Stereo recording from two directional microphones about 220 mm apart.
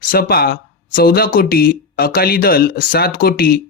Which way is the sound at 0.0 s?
45° left (ahead or behind).